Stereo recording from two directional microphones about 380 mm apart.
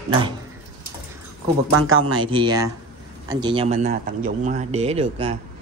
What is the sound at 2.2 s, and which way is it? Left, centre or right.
A man's voice, centre.